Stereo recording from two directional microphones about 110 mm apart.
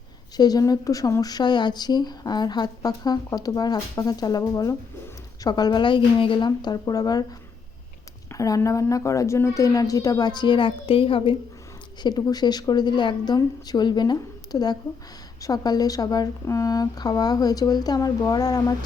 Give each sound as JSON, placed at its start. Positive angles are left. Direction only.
{"t": 0.3, "sound": "speech", "side_deg": 35}
{"t": 12.0, "sound": "speech", "side_deg": 35}